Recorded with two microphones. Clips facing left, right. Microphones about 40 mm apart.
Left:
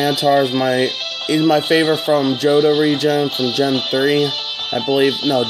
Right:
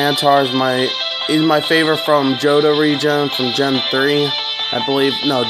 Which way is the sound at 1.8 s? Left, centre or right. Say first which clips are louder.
Right 1 dB; right.